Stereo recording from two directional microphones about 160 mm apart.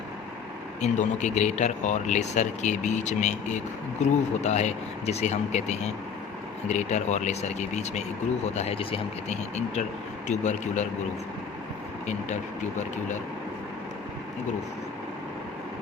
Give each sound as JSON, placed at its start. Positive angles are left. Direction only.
{"t": 0.8, "sound": "speech", "side_deg": 45}
{"t": 12.0, "sound": "speech", "side_deg": 50}